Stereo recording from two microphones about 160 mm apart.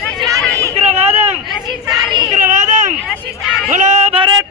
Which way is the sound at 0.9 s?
40° right (ahead or behind).